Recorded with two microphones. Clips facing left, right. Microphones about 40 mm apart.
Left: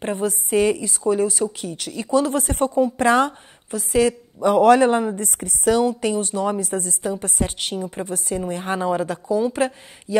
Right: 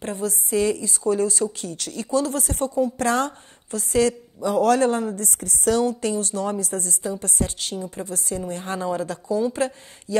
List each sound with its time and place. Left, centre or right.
0.0 s a woman's voice: left
2.0 s a woman's voice: left
4.6 s a woman's voice: left